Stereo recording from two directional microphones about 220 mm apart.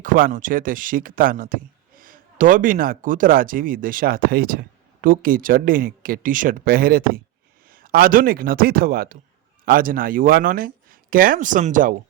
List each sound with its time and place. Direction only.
0.0 s speech: 40° right (ahead or behind)